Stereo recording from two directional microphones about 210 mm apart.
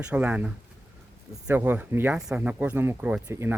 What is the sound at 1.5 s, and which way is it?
Speech, 10° right (ahead or behind).